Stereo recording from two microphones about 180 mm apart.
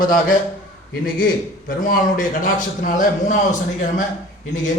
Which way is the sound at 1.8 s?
50° left (ahead or behind).